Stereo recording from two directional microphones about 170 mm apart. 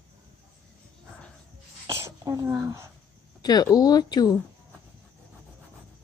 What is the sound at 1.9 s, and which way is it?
Throat clearing, 15° right (ahead or behind).